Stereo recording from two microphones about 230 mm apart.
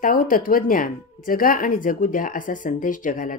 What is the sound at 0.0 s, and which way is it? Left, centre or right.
A woman's voice, left.